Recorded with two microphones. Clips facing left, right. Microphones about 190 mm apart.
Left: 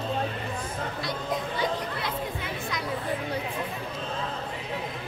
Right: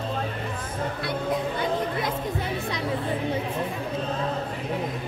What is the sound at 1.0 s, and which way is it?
Music, 55° right (ahead or behind).